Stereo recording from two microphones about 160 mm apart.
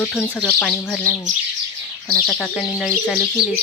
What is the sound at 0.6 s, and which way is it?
Speech, 10° left (ahead or behind).